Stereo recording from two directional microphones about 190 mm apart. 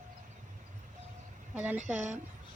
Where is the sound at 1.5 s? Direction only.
10° right (ahead or behind).